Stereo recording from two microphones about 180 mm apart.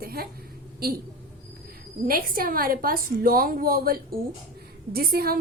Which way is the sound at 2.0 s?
55° right (ahead or behind).